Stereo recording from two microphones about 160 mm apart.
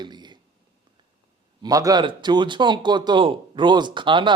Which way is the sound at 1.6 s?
25° right (ahead or behind).